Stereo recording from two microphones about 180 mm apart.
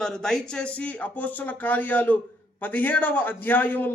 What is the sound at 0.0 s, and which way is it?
A man's voice, 5° left (ahead or behind).